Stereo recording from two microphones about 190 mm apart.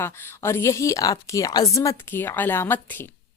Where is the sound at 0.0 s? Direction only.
15° left (ahead or behind).